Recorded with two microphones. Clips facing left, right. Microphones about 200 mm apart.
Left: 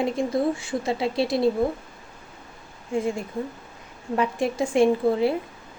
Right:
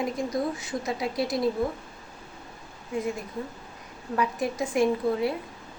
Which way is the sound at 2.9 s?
30° left (ahead or behind).